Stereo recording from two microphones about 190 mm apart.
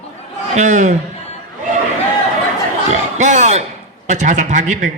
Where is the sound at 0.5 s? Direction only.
40° right (ahead or behind).